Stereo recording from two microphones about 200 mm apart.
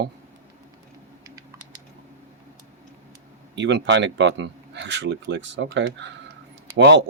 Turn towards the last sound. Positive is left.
turn(degrees=-60)  # may be behind; listen again after turning